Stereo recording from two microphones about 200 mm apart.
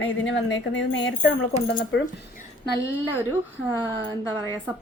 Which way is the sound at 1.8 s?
45° left (ahead or behind).